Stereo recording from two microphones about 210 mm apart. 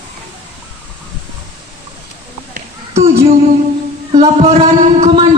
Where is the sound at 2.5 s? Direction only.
30° right (ahead or behind).